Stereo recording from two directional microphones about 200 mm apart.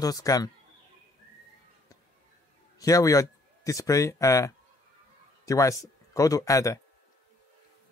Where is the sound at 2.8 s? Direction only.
15° left (ahead or behind).